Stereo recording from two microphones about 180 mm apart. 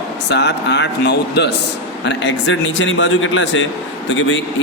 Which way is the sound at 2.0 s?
90° left.